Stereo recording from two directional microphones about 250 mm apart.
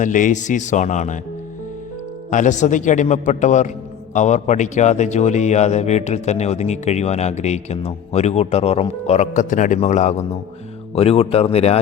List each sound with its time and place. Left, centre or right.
0.0 s speech: left
2.3 s speech: left